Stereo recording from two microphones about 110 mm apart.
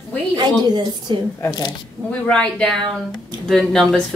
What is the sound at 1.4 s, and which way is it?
Speech, 35° left (ahead or behind).